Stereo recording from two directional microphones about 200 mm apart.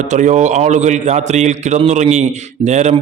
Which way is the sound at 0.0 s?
35° right (ahead or behind).